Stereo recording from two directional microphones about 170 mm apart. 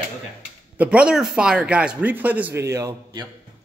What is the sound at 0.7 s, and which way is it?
A man's voice, 5° right (ahead or behind).